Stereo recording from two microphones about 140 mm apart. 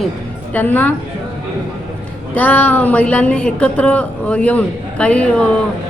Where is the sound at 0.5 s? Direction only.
10° left (ahead or behind).